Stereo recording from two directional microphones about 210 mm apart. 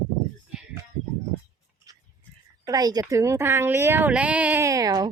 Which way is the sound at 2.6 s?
20° right (ahead or behind).